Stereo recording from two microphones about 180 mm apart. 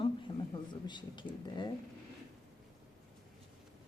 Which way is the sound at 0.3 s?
20° left (ahead or behind).